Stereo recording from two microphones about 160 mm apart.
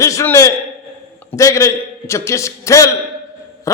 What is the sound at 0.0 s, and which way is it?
A man's voice, 20° left (ahead or behind).